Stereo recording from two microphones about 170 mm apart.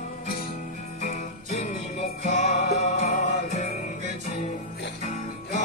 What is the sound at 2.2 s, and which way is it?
Music, 40° left (ahead or behind).